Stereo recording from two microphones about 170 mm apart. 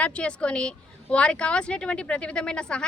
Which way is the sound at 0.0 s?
5° left (ahead or behind).